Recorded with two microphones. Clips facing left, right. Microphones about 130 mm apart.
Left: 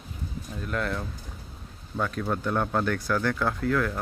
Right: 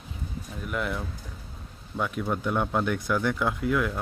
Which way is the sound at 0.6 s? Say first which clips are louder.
Left 1 dB; 15° right (ahead or behind).